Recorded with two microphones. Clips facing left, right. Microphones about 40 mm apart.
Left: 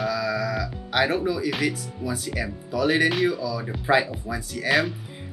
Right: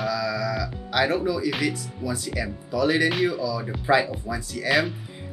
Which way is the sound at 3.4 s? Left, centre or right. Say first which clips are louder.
Right 1 dB; centre.